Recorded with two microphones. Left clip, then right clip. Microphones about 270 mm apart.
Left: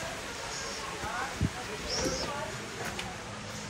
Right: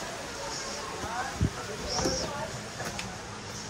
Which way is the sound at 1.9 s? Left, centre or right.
Centre.